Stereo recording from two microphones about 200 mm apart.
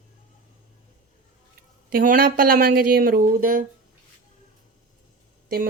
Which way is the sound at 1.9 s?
45° right (ahead or behind).